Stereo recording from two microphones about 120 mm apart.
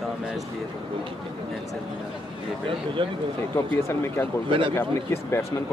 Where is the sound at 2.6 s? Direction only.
45° right (ahead or behind).